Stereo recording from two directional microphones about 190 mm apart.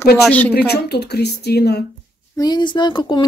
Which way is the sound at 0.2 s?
10° left (ahead or behind).